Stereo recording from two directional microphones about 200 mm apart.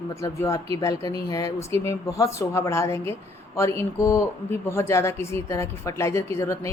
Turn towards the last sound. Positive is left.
turn(degrees=15)  # may be behind; listen again after turning